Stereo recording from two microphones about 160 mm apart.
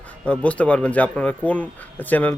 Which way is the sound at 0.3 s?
10° left (ahead or behind).